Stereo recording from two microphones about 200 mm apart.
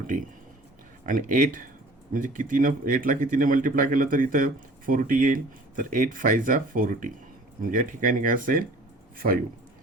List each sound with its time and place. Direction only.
1.0 s speech: 40° right (ahead or behind)